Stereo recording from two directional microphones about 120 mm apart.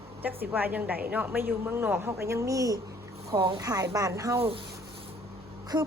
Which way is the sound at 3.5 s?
30° right (ahead or behind).